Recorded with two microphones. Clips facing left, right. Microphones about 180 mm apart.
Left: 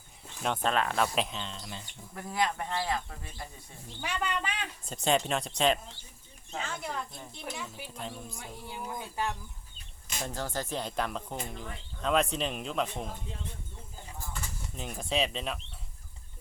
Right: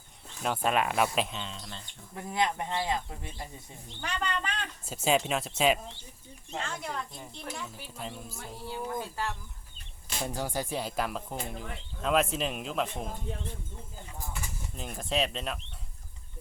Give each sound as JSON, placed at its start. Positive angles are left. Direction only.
{"t": 0.4, "sound": "speech", "side_deg": -5}
{"t": 2.1, "sound": "speech", "side_deg": -20}
{"t": 3.8, "sound": "speech", "side_deg": 5}
{"t": 4.9, "sound": "speech", "side_deg": -5}
{"t": 8.4, "sound": "speech", "side_deg": 15}
{"t": 10.2, "sound": "speech", "side_deg": -10}
{"t": 14.8, "sound": "speech", "side_deg": 0}